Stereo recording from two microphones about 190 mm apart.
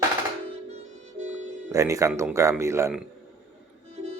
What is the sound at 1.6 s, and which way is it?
Speech, 15° right (ahead or behind).